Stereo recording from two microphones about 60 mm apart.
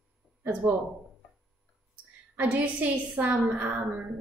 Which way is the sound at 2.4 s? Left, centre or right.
Right.